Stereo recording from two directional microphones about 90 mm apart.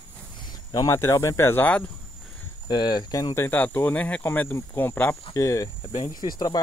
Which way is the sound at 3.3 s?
30° left (ahead or behind).